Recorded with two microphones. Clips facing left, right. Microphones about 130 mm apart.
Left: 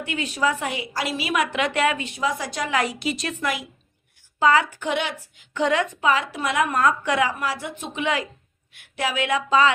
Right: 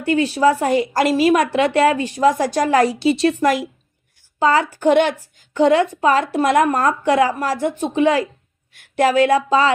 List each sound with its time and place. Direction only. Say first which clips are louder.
0.0 s a woman's voice: right 9 dB; 35° right (ahead or behind)
4.4 s a woman's voice: right 3 dB; 35° right (ahead or behind)
5.5 s a woman's voice: right 8 dB; 35° right (ahead or behind)